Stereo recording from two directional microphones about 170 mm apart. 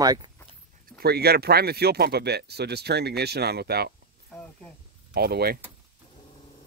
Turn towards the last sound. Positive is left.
turn(degrees=-65)  # may be behind; listen again after turning